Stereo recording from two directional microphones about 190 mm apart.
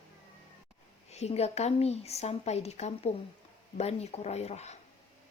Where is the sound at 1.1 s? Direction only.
35° left (ahead or behind).